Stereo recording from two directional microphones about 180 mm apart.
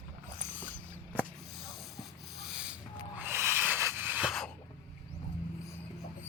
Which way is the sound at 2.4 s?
5° right (ahead or behind).